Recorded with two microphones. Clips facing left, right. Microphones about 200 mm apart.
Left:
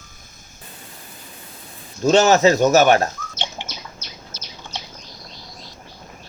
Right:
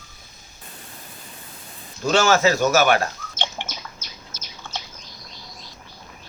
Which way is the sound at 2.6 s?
40° left (ahead or behind).